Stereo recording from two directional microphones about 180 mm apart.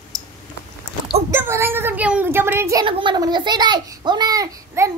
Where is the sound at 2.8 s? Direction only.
30° right (ahead or behind).